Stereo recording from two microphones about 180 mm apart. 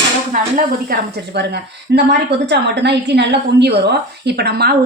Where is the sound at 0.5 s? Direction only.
60° right (ahead or behind).